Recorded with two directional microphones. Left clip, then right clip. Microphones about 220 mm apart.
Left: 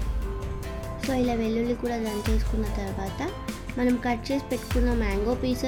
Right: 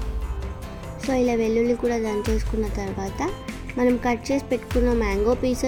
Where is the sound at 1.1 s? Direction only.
20° right (ahead or behind).